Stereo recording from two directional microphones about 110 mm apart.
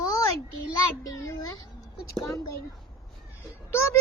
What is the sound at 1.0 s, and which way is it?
Child singing, 30° left (ahead or behind).